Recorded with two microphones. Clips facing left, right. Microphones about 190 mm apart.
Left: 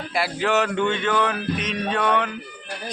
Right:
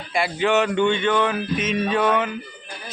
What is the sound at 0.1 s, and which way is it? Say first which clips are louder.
Speech: right 2 dB; centre (ahead or behind).